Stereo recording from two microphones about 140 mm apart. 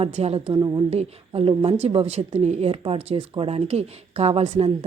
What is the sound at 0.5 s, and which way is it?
Speech, 30° right (ahead or behind).